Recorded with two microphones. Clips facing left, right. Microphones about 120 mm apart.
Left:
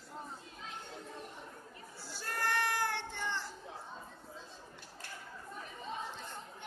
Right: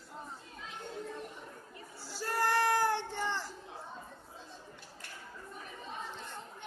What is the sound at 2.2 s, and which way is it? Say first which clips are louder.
Child singing: right 5 dB; 35° right (ahead or behind).